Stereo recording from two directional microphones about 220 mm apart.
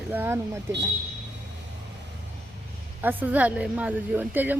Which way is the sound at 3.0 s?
10° right (ahead or behind).